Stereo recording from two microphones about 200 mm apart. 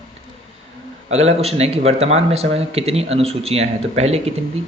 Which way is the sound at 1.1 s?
30° right (ahead or behind).